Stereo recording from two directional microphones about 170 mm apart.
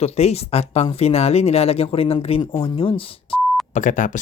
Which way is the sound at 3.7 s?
50° left (ahead or behind).